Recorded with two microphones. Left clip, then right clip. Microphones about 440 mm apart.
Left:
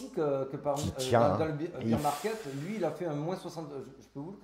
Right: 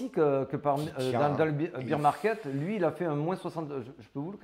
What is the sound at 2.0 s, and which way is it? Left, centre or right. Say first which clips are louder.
Speech: right 5 dB; right.